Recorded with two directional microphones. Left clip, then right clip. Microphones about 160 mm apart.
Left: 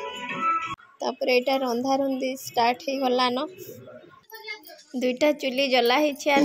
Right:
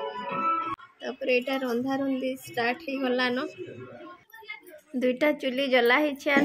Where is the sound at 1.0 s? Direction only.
30° left (ahead or behind).